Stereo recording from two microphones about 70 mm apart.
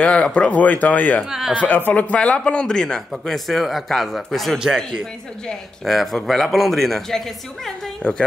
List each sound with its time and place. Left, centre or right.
0.0 s a man's voice: centre